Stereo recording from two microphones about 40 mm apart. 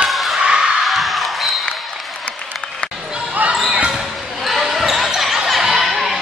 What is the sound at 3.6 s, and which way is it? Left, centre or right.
Basketball bounce, right.